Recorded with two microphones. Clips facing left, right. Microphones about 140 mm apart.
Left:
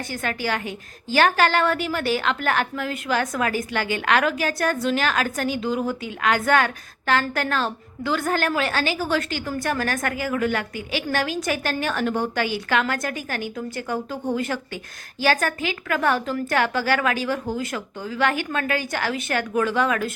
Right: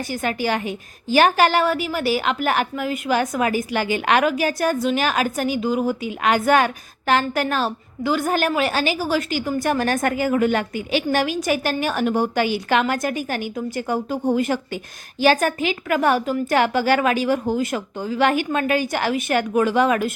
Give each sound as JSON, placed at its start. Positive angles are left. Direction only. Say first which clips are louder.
{"t": 0.1, "sound": "a woman's voice", "louder": "right 4 dB", "side_deg": -15}
{"t": 9.6, "sound": "a woman's voice", "louder": "right 4 dB", "side_deg": -20}